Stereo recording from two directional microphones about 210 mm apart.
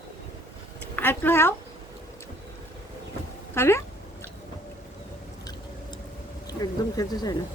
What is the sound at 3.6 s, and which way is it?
Speech, 10° left (ahead or behind).